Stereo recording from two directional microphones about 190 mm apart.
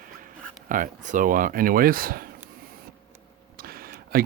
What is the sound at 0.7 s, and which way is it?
Speech, 45° right (ahead or behind).